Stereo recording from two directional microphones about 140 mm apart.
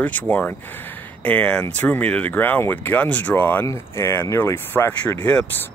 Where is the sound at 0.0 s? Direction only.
10° left (ahead or behind).